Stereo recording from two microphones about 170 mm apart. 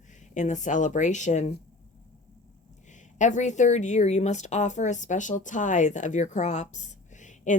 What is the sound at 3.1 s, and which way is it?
Speech, 45° left (ahead or behind).